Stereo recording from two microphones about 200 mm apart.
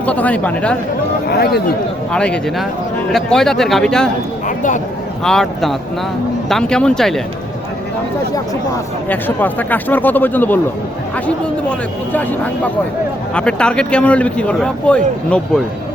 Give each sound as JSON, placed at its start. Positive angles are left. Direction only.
{"t": 0.0, "sound": "speech", "side_deg": 5}
{"t": 1.3, "sound": "speech", "side_deg": 55}
{"t": 2.1, "sound": "speech", "side_deg": 5}
{"t": 4.4, "sound": "a sound", "side_deg": 40}
{"t": 5.2, "sound": "speech", "side_deg": 5}
{"t": 9.0, "sound": "speech", "side_deg": 10}
{"t": 13.3, "sound": "speech", "side_deg": 5}